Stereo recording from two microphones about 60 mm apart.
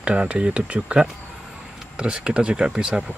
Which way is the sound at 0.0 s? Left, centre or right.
Centre.